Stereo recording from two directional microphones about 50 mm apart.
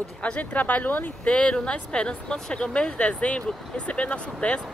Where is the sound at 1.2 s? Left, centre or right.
Centre.